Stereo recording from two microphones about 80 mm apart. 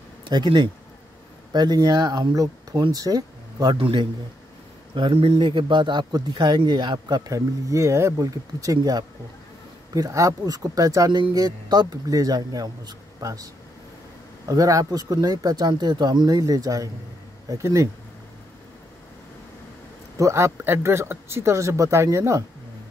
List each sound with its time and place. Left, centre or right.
0.2 s speech: right
1.5 s speech: right
3.8 s a man's voice: right
7.3 s speech: right
11.1 s speech: right
14.5 s speech: right
20.2 s speech: right